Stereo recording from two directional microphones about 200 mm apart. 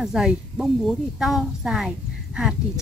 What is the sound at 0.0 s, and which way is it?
Speech, centre (ahead or behind).